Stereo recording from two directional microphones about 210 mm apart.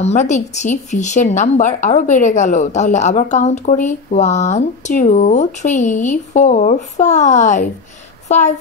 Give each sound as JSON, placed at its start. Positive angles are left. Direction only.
{"t": 0.0, "sound": "a woman's voice", "side_deg": 35}